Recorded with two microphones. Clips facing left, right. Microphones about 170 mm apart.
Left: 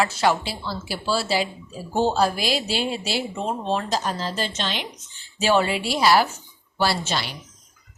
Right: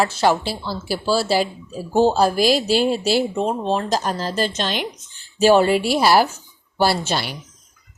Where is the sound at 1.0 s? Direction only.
40° right (ahead or behind).